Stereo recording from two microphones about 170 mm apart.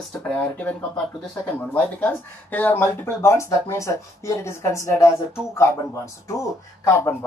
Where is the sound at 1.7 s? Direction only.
10° left (ahead or behind).